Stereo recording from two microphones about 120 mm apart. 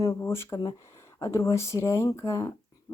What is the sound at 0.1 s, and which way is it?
Speech, 20° left (ahead or behind).